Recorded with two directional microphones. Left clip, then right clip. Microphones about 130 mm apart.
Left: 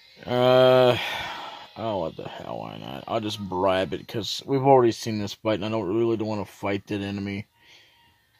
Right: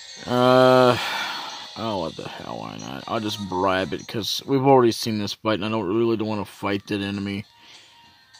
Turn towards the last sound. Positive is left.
turn(degrees=-30)  # may be behind; listen again after turning